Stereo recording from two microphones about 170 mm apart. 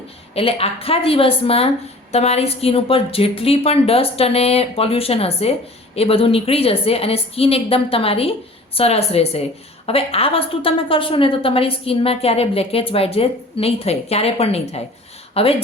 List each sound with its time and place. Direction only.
0.3 s a woman's voice: 35° left (ahead or behind)